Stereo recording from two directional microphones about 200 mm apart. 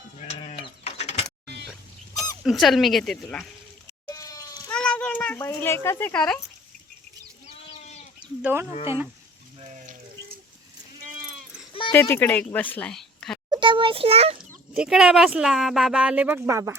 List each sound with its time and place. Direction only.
0.2 s sheep: 30° left (ahead or behind)
2.4 s speech: centre (ahead or behind)
4.1 s goat: 15° left (ahead or behind)
4.7 s a sound: 5° left (ahead or behind)
8.4 s speech: 10° right (ahead or behind)
9.6 s water: 40° right (ahead or behind)
11.9 s speech: 10° left (ahead or behind)
13.5 s a child's voice: 25° right (ahead or behind)
14.7 s speech: 5° right (ahead or behind)